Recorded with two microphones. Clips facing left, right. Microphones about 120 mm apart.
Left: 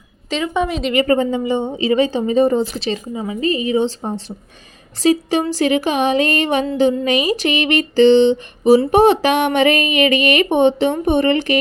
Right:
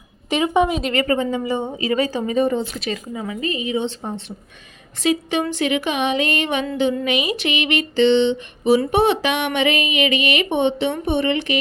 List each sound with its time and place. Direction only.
0.5 s a woman's voice: 15° right (ahead or behind)
1.0 s speech: 35° left (ahead or behind)
1.7 s speech: 25° left (ahead or behind)
3.5 s speech: 40° left (ahead or behind)